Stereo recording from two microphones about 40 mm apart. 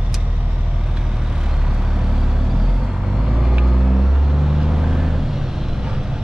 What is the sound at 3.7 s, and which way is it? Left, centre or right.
Vehicle, centre.